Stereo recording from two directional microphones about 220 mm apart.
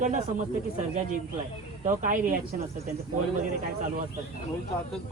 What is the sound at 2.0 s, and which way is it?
Speech, 40° right (ahead or behind).